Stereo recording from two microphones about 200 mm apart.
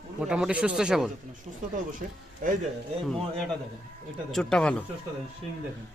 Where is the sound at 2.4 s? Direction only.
45° right (ahead or behind).